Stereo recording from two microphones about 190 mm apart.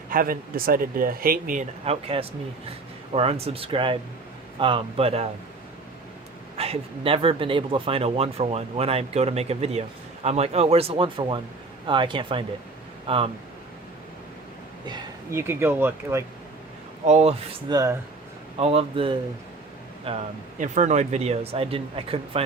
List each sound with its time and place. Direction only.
0.1 s speech: 50° right (ahead or behind)
1.8 s speech: 30° right (ahead or behind)
6.6 s speech: 30° right (ahead or behind)
14.8 s speech: 20° right (ahead or behind)
17.1 s speech: 35° right (ahead or behind)
17.7 s speech: 20° right (ahead or behind)
18.5 s speech: 30° right (ahead or behind)